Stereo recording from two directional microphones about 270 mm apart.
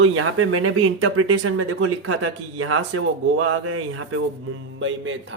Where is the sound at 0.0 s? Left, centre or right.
Right.